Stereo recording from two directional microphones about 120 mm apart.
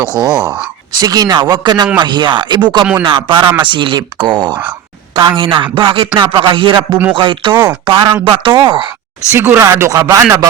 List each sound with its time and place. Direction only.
0.0 s a man's voice: 35° right (ahead or behind)
9.3 s speech: 20° right (ahead or behind)